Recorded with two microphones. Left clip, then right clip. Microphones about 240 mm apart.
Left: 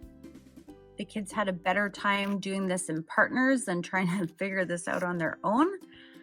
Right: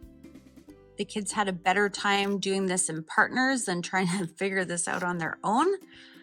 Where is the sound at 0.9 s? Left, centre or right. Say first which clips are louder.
Right 4 dB; centre.